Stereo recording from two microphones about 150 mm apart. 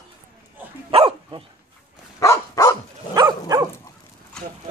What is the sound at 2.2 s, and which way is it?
Dog, 20° left (ahead or behind).